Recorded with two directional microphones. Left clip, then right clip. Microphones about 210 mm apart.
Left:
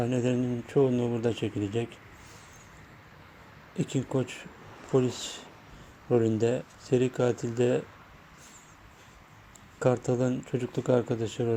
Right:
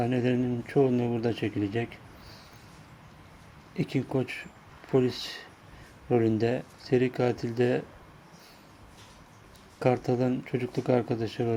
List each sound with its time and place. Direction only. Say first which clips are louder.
0.0 s speech: right 1 dB; 15° left (ahead or behind)
3.8 s speech: right 1 dB; 15° left (ahead or behind)
9.8 s speech: even; 15° left (ahead or behind)